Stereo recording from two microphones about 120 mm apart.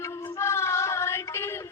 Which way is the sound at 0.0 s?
25° left (ahead or behind).